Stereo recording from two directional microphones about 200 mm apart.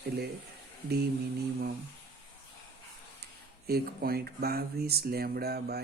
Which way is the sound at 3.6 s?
50° right (ahead or behind).